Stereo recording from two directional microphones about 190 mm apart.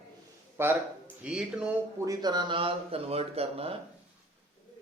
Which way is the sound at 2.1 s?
20° right (ahead or behind).